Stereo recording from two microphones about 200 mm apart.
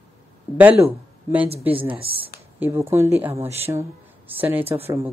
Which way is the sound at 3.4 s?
30° right (ahead or behind).